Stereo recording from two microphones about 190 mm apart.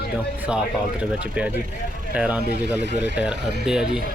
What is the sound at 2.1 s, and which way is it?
Speech, 5° right (ahead or behind).